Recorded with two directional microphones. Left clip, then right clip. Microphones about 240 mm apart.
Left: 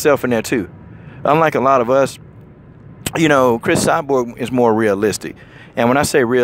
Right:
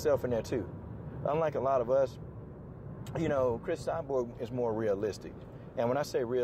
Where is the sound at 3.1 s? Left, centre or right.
Left.